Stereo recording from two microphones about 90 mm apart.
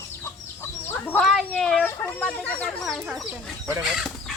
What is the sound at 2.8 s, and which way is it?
Speech, centre (ahead or behind).